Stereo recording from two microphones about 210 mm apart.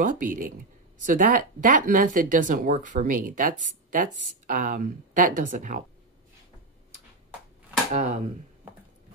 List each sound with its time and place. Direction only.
0.0 s speech: 40° right (ahead or behind)
7.9 s speech: 35° right (ahead or behind)